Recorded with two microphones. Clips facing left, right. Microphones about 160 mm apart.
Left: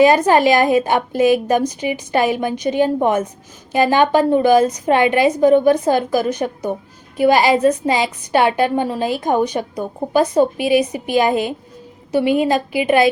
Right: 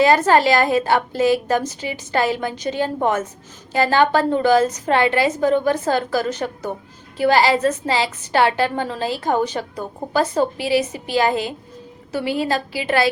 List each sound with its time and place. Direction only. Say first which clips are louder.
0.0 s a woman's voice: left 3 dB; 15° left (ahead or behind)